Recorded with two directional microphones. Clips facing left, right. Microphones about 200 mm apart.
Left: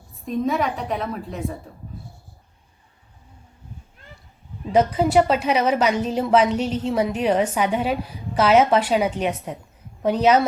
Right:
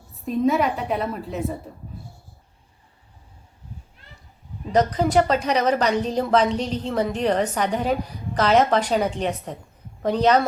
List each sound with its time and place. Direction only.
0.3 s a woman's voice: centre (ahead or behind)
4.7 s a woman's voice: 5° left (ahead or behind)